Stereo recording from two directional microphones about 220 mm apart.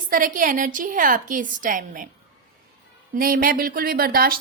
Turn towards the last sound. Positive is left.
turn(degrees=-40)  # may be behind; listen again after turning